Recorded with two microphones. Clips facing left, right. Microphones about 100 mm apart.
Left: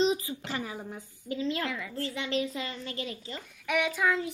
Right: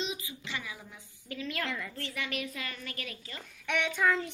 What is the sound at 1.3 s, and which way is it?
Speech, 20° left (ahead or behind).